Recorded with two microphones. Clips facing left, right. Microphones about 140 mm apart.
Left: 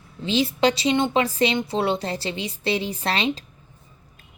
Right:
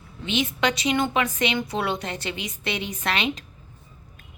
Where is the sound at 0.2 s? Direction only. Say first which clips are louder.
Left 4 dB; 35° left (ahead or behind).